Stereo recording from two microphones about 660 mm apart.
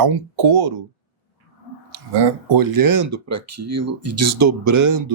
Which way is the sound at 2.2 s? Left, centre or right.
Right.